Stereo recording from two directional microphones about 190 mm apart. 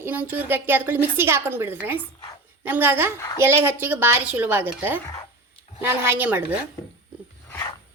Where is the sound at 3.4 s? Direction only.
10° right (ahead or behind).